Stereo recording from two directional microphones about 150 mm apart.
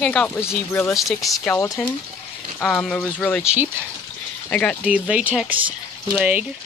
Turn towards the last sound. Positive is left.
turn(degrees=-10)  # may be behind; listen again after turning